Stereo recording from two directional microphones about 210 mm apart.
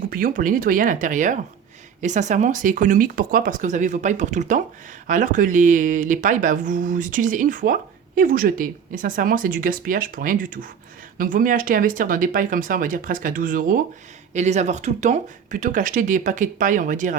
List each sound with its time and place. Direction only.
0.1 s speech: 40° right (ahead or behind)